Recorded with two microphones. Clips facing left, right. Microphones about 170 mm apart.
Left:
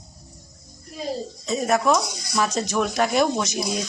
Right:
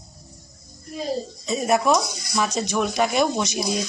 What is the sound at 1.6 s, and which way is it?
Speech, 10° right (ahead or behind).